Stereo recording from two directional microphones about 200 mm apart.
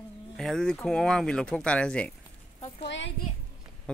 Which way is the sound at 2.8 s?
65° left (ahead or behind).